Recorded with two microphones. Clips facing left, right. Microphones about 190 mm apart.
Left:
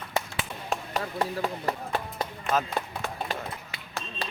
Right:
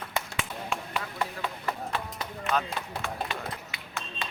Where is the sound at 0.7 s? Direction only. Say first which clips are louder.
Left 3 dB; 40° left (ahead or behind).